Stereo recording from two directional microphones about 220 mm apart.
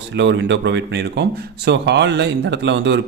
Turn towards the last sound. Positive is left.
turn(degrees=-55)  # may be behind; listen again after turning